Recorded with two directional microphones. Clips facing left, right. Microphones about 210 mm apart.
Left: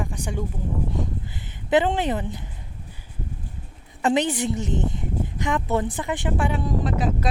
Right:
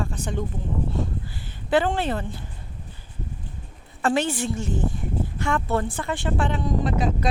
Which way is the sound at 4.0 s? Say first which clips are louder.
Left 2 dB; 20° left (ahead or behind).